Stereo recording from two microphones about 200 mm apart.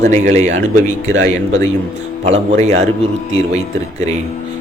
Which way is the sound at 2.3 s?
35° right (ahead or behind).